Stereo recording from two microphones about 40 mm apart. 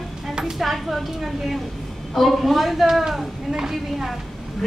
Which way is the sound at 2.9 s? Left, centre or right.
Centre.